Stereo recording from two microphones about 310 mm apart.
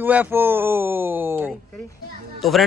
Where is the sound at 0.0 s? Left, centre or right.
Centre.